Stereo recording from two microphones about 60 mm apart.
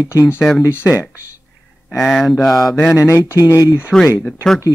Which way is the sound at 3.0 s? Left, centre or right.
Left.